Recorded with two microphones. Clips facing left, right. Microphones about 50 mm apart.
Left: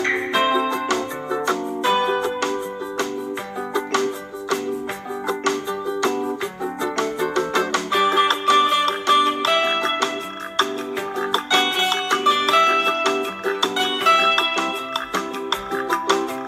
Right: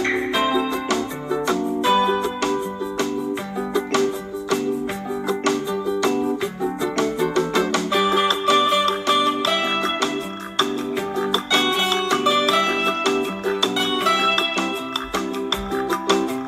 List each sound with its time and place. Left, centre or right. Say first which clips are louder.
0.0 s music: left 1 dB; left
6.8 s music: right 1 dB; left
11.5 s music: even; left
15.7 s music: even; left